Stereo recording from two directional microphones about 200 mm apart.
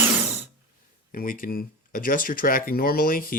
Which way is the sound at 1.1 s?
45° left (ahead or behind).